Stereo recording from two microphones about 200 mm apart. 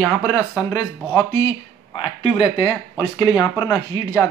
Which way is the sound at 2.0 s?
25° left (ahead or behind).